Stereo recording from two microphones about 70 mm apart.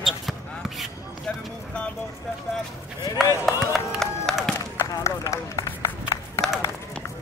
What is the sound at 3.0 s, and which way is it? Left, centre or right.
Run, left.